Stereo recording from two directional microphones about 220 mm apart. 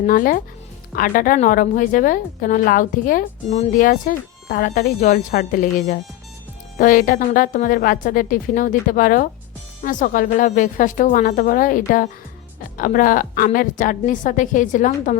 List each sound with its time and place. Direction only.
0.0 s a woman's voice: 40° left (ahead or behind)